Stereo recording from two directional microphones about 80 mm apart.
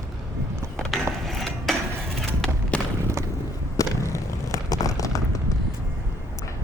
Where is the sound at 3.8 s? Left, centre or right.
Left.